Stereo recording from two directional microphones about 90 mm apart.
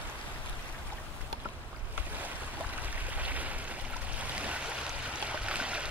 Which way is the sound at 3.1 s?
15° right (ahead or behind).